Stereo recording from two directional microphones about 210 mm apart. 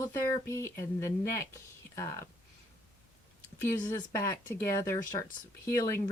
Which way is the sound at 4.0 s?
15° left (ahead or behind).